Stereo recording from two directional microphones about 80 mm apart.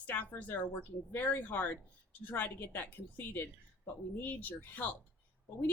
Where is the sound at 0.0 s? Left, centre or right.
Left.